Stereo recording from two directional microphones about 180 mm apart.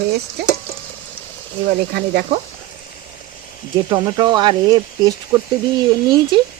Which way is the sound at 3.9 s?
25° right (ahead or behind).